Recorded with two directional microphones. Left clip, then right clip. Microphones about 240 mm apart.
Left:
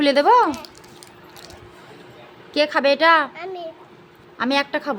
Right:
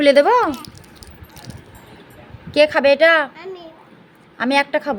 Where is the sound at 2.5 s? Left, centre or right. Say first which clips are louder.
Right 5 dB; centre.